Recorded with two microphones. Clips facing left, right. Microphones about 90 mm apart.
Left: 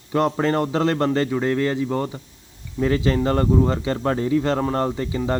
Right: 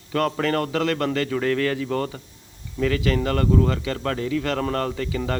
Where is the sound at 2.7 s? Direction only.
30° left (ahead or behind).